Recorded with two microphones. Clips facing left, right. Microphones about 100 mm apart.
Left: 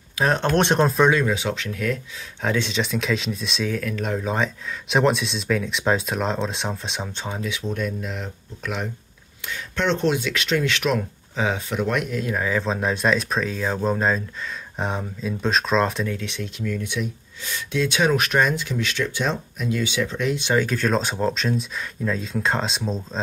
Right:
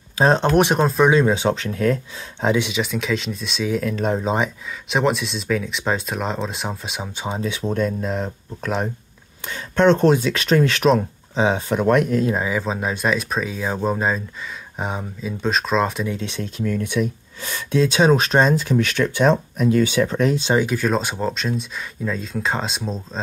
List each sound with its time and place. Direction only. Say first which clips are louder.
0.2 s speech: right 5 dB; 25° right (ahead or behind)
0.5 s speech: right 2 dB; 5° right (ahead or behind)
1.1 s speech: right 5 dB; 35° right (ahead or behind)
2.4 s speech: right 3 dB; 15° right (ahead or behind)
3.9 s speech: right 4 dB; 30° right (ahead or behind)
4.8 s speech: even; centre (ahead or behind)
7.2 s speech: right 5 dB; 30° right (ahead or behind)
11.7 s speech: right 7 dB; 40° right (ahead or behind)
12.4 s speech: right 1 dB; 10° right (ahead or behind)
16.2 s speech: right 4 dB; 35° right (ahead or behind)
20.5 s speech: right 2 dB; 10° right (ahead or behind)